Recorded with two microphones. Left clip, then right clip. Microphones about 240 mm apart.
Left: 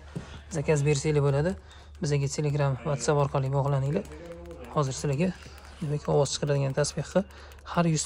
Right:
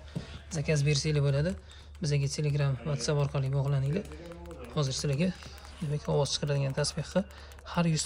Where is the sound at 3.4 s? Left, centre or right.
Left.